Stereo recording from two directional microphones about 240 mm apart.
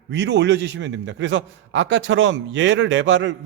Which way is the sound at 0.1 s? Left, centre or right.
Right.